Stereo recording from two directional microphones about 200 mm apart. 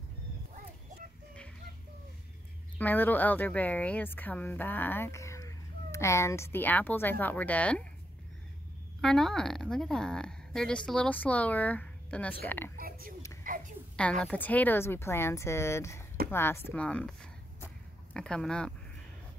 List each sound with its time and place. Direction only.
2.8 s speech: 10° left (ahead or behind)
9.0 s speech: 5° left (ahead or behind)
12.7 s a sound: 45° right (ahead or behind)
14.2 s speech: 10° left (ahead or behind)